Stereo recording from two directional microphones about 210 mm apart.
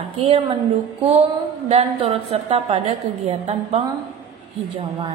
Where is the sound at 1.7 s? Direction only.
30° right (ahead or behind).